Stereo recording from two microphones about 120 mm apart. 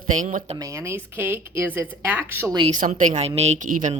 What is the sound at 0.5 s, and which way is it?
Speech, 25° right (ahead or behind).